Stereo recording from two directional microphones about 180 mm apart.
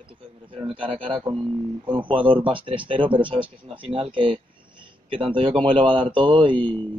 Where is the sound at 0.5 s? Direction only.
30° right (ahead or behind).